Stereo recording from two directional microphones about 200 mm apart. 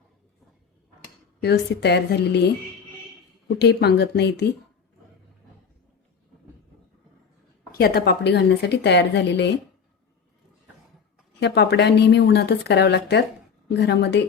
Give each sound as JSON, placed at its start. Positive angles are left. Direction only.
{"t": 1.4, "sound": "a woman's voice", "side_deg": 55}
{"t": 3.6, "sound": "a woman's voice", "side_deg": 55}
{"t": 7.7, "sound": "a woman's voice", "side_deg": 50}
{"t": 11.3, "sound": "a woman's voice", "side_deg": 60}